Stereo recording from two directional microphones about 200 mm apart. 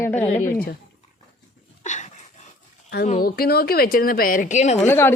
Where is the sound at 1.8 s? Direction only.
35° left (ahead or behind).